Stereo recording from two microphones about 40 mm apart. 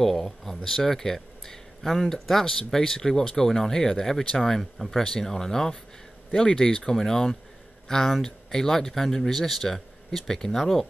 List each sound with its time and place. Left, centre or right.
0.0 s speech: centre